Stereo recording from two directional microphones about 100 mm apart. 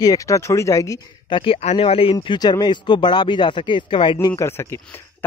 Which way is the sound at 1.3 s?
65° left (ahead or behind).